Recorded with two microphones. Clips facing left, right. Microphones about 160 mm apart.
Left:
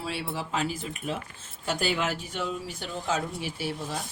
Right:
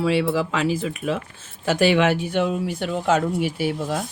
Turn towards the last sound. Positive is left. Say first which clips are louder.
# right 9 dB
turn(degrees=-65)  # may be behind; listen again after turning